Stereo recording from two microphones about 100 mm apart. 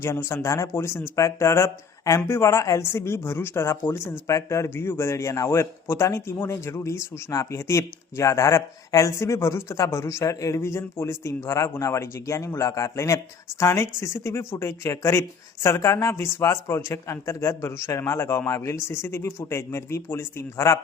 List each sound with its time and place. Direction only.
0.0 s speech: 25° left (ahead or behind)